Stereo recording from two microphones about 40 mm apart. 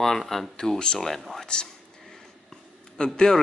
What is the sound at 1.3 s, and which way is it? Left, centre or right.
Speech, centre.